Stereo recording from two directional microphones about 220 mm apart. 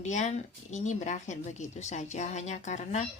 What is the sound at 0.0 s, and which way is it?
Speech, 35° left (ahead or behind).